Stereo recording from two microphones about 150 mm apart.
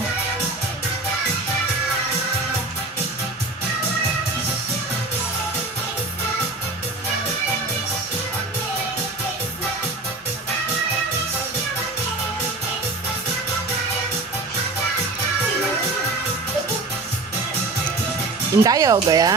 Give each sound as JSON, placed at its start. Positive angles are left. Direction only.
{"t": 18.5, "sound": "speech", "side_deg": -20}